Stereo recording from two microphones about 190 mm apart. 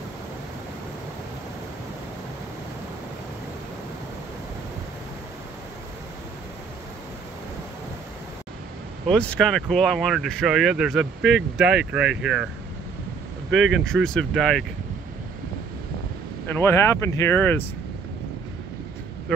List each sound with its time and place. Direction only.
9.1 s speech: 5° left (ahead or behind)
13.5 s speech: 80° right
14.1 s speech: centre (ahead or behind)
16.5 s speech: 15° left (ahead or behind)